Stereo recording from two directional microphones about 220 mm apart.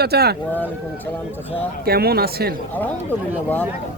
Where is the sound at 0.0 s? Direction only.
45° right (ahead or behind).